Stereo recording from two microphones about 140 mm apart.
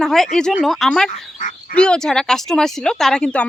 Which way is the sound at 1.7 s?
5° left (ahead or behind).